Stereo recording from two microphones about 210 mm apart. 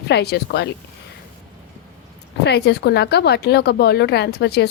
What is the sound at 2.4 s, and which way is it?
Speech, 50° left (ahead or behind).